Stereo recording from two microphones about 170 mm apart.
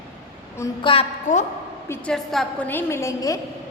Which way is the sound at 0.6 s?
20° left (ahead or behind).